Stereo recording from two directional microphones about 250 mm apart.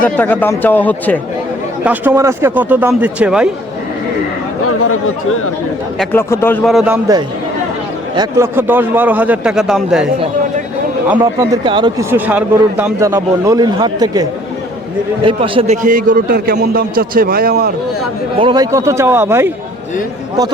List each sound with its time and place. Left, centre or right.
0.0 s speech: centre
1.8 s speech: centre
4.6 s speech: left
6.0 s a man's voice: centre
8.1 s speech: centre
11.1 s a man's voice: centre; by 17.7 s right
18.3 s speech: centre